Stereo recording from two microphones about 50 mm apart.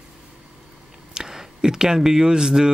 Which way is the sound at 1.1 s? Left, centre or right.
Centre.